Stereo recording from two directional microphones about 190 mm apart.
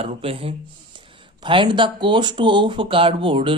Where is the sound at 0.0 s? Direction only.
30° right (ahead or behind).